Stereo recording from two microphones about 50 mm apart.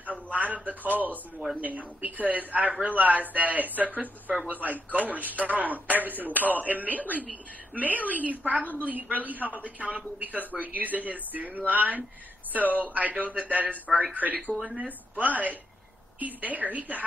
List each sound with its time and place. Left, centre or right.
0.3 s a sound: right
1.6 s a woman's voice: right
7.0 s speech: left
7.7 s a woman's voice: right